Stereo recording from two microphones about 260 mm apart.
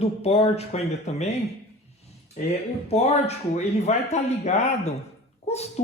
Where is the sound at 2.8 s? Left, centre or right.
Left.